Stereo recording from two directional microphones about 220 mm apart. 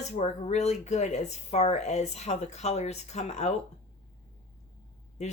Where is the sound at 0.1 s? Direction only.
30° left (ahead or behind).